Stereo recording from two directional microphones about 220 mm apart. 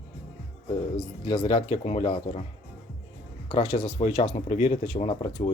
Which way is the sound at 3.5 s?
25° left (ahead or behind).